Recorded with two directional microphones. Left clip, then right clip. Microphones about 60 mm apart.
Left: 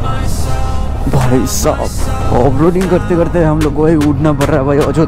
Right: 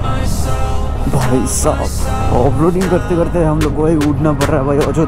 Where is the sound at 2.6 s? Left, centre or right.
Centre.